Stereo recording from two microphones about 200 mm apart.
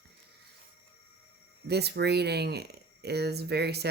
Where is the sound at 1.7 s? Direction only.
55° right (ahead or behind).